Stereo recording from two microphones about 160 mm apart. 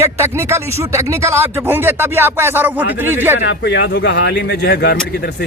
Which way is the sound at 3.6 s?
90° left.